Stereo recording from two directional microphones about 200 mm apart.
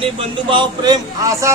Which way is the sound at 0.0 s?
25° right (ahead or behind).